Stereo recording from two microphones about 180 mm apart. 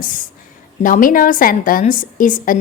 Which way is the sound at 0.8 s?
45° left (ahead or behind).